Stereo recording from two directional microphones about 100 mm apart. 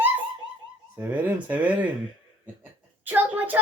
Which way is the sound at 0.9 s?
15° right (ahead or behind).